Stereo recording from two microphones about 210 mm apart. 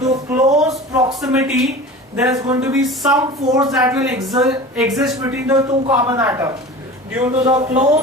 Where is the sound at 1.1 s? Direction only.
Centre (ahead or behind).